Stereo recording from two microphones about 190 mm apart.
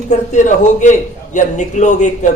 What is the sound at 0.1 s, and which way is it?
A man's voice, 40° left (ahead or behind).